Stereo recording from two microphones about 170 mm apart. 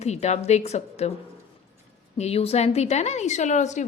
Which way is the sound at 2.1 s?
40° left (ahead or behind).